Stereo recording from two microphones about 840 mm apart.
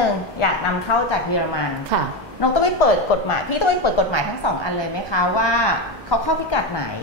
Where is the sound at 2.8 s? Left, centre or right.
Left.